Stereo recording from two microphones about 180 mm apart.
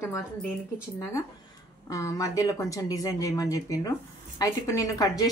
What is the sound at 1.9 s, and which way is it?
Speech, 20° left (ahead or behind).